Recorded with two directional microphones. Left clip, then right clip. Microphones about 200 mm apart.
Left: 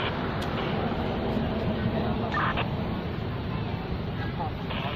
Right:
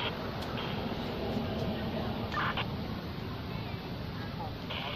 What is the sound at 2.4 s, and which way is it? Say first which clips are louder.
Duck: left 5 dB; 55° right (ahead or behind).